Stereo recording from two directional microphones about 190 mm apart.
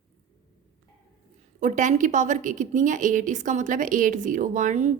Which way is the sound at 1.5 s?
40° right (ahead or behind).